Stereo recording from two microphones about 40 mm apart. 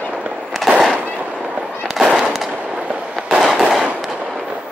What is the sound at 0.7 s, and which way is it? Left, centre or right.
Fireworks, centre.